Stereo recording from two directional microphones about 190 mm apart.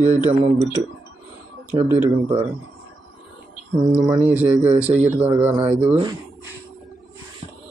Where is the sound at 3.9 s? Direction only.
5° right (ahead or behind).